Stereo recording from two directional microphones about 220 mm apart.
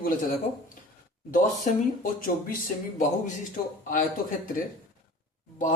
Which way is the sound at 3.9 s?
40° left (ahead or behind).